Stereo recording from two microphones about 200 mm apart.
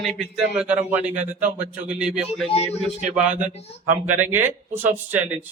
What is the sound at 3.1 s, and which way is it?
A man's voice, 10° right (ahead or behind).